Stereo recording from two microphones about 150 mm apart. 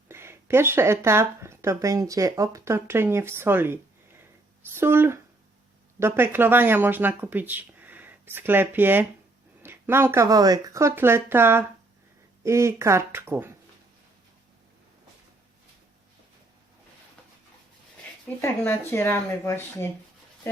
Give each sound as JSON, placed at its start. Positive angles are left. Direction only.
{"t": 0.1, "sound": "speech", "side_deg": -15}
{"t": 18.4, "sound": "speech", "side_deg": 15}